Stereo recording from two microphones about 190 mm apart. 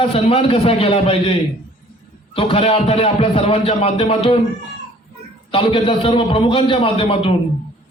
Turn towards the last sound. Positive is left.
turn(degrees=30)  # may be behind; listen again after turning